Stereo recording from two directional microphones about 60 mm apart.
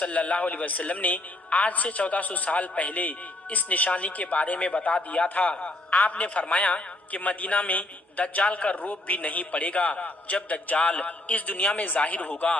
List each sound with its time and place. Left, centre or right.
0.0 s a man's voice: left